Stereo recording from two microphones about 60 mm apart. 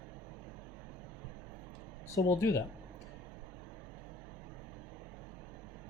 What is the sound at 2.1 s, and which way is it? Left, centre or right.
Speech, left.